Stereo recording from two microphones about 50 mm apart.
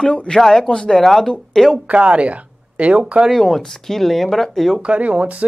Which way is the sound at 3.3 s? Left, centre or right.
Centre.